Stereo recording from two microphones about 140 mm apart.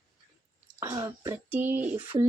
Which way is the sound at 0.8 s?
20° right (ahead or behind).